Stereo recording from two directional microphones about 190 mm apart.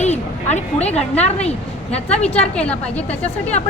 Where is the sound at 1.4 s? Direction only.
35° left (ahead or behind).